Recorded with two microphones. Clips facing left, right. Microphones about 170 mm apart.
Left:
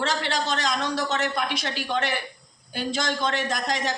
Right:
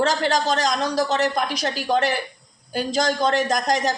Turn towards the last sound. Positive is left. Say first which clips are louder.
# right 6 dB
turn(degrees=-40)  # may be behind; listen again after turning